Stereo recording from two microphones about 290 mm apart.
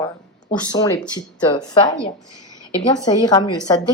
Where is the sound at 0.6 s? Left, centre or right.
Centre.